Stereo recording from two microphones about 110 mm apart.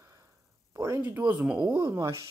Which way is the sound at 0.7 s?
25° right (ahead or behind).